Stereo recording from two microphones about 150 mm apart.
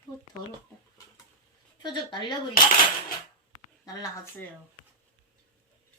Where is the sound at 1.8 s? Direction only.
30° left (ahead or behind).